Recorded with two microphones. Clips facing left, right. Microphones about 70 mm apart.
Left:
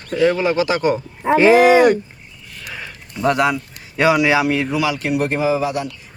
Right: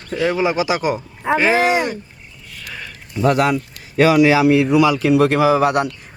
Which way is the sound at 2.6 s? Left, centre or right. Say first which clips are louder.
Left 1 dB; centre.